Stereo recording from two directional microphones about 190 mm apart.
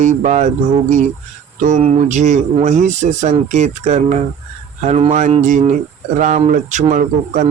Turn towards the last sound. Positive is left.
turn(degrees=-40)  # may be behind; listen again after turning